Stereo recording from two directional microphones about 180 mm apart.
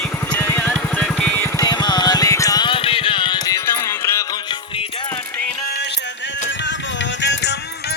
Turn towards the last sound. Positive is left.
turn(degrees=75)  # may be behind; listen again after turning